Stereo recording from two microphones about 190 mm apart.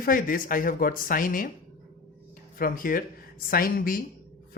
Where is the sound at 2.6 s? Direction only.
45° left (ahead or behind).